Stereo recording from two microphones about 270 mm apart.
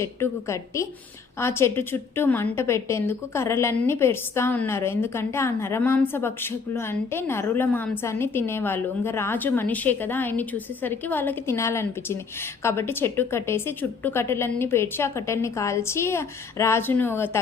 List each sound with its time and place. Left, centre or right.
0.0 s a woman's voice: centre